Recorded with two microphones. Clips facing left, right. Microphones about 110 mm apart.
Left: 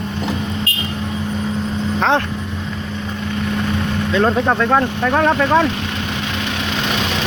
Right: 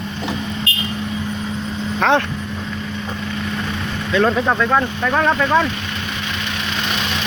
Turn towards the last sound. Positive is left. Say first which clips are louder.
# left 2 dB
turn(degrees=25)  # may be behind; listen again after turning